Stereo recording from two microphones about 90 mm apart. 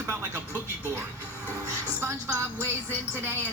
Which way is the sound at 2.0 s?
30° right (ahead or behind).